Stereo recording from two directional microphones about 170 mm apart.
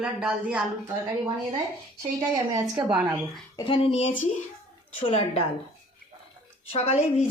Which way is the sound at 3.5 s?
25° left (ahead or behind).